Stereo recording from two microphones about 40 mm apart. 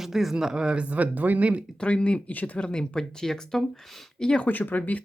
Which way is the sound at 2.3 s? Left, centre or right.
Left.